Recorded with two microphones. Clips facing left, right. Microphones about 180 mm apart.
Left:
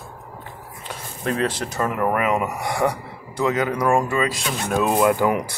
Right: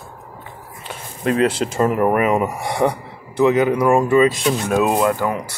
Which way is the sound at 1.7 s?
25° right (ahead or behind).